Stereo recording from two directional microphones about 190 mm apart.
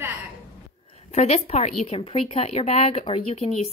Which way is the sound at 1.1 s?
35° left (ahead or behind).